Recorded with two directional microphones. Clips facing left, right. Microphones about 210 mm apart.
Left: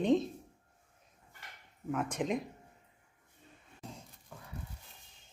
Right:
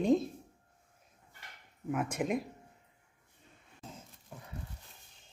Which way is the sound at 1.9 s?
10° right (ahead or behind).